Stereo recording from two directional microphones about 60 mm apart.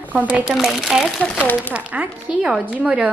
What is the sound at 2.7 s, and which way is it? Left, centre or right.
Speech, centre.